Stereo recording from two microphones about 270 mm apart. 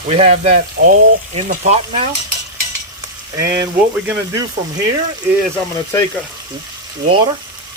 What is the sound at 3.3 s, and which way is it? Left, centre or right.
Speech, centre.